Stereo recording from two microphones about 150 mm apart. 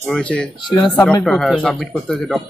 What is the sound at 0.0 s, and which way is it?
Speech, 10° left (ahead or behind).